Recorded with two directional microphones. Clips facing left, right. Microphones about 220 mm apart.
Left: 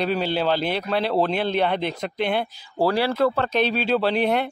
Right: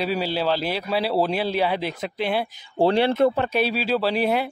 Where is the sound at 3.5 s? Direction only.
5° right (ahead or behind).